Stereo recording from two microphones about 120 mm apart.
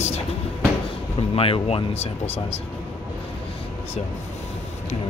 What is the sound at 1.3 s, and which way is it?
Speech, 50° left (ahead or behind).